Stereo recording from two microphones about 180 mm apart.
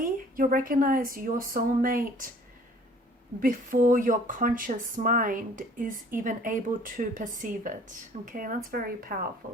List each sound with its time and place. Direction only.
0.0 s speech: 50° right (ahead or behind)
3.4 s speech: 50° right (ahead or behind)